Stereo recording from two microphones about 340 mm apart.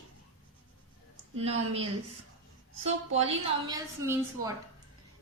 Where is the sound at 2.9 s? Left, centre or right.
Centre.